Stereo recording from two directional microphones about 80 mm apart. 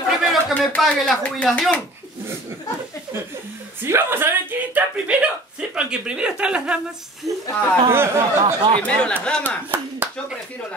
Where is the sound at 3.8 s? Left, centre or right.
Right; by 6.8 s centre.